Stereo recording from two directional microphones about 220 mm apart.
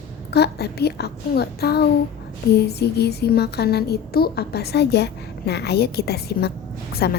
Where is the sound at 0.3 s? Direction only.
50° left (ahead or behind).